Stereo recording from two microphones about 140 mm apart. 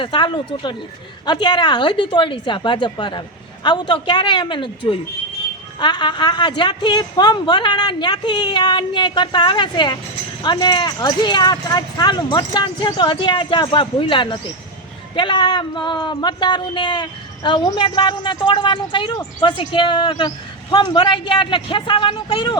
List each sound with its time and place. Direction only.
0.0 s speech: 35° left (ahead or behind)